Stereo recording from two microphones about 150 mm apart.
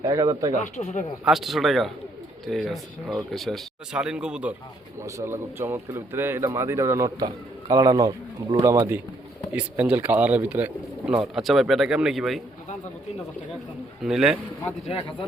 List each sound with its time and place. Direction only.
0.0 s speech: 25° right (ahead or behind)
0.8 s speech: 50° left (ahead or behind)
1.2 s speech: centre (ahead or behind)
4.9 s speech: 20° right (ahead or behind)
9.5 s speech: 10° right (ahead or behind)
14.0 s speech: centre (ahead or behind)